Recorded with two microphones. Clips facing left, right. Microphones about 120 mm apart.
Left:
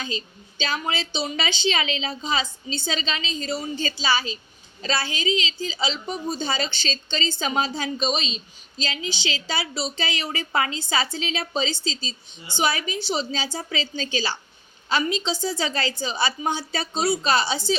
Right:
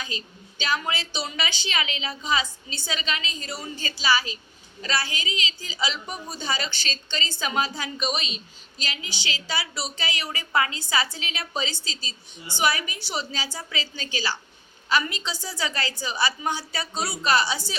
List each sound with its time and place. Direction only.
0.6 s a woman's voice: 25° left (ahead or behind)